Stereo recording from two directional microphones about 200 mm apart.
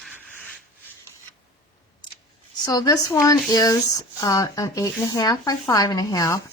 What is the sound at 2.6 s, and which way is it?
Speech, 20° left (ahead or behind).